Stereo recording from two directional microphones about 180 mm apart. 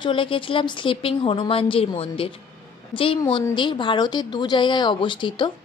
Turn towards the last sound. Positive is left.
turn(degrees=25)  # may be behind; listen again after turning